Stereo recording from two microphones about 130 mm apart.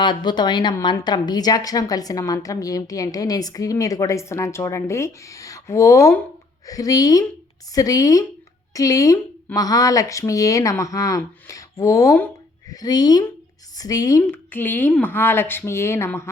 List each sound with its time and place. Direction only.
0.0 s a woman's voice: 35° left (ahead or behind); by 12.3 s 20° left (ahead or behind)
12.7 s a woman's voice: 30° left (ahead or behind)
14.5 s speech: 15° left (ahead or behind)